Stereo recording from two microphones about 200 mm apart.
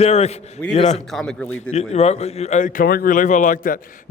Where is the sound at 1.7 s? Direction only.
35° left (ahead or behind).